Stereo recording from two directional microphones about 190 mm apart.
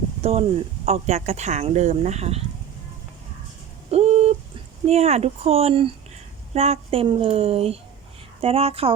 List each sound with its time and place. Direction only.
0.2 s speech: 35° right (ahead or behind)
3.9 s a sound: 35° right (ahead or behind)
4.9 s speech: 35° right (ahead or behind)